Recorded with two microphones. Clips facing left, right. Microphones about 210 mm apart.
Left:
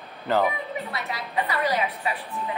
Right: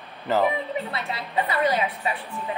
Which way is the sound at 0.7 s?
30° right (ahead or behind).